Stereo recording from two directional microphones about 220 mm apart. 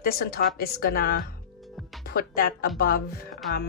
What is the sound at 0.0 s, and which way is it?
Speech, 45° left (ahead or behind).